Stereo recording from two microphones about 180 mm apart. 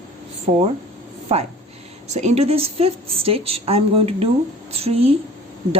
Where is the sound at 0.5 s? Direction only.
35° right (ahead or behind).